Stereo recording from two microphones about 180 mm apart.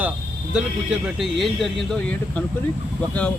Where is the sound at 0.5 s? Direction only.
5° right (ahead or behind).